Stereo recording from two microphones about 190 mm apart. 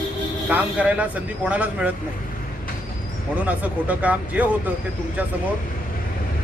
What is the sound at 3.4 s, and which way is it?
Speech, 10° right (ahead or behind).